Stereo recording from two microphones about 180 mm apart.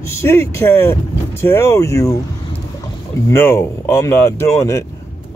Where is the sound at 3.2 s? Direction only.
15° left (ahead or behind).